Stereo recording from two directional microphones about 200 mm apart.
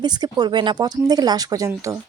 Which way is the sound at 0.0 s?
20° right (ahead or behind).